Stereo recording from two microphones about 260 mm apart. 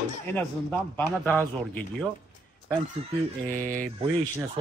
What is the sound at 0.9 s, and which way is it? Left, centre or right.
Speech, centre.